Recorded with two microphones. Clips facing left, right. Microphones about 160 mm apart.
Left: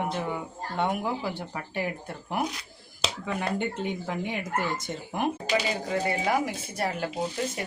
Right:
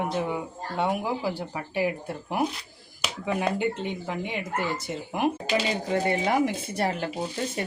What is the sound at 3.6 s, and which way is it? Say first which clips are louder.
Speech: right 2 dB; centre (ahead or behind).